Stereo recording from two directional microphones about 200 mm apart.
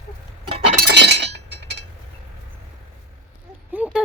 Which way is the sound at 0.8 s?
55° right (ahead or behind).